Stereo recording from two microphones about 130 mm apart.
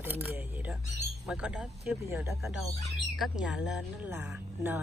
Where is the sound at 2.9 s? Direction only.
Centre (ahead or behind).